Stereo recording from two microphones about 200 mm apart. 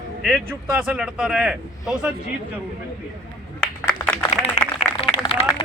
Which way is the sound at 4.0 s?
20° left (ahead or behind).